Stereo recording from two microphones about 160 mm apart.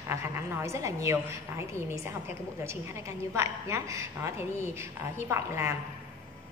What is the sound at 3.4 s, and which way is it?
Speech, 15° right (ahead or behind).